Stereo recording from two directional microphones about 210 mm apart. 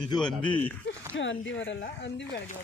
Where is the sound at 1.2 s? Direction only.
60° left (ahead or behind).